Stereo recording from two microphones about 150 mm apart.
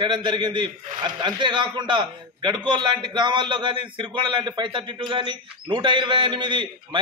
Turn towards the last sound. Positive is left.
turn(degrees=-35)  # may be behind; listen again after turning